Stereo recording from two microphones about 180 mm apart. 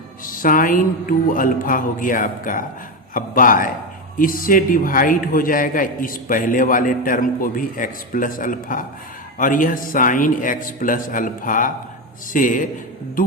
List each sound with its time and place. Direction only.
0.4 s a man's voice: 50° left (ahead or behind)